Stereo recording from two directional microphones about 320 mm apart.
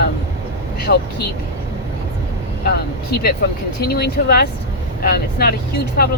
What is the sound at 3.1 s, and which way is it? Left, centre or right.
Speech, left.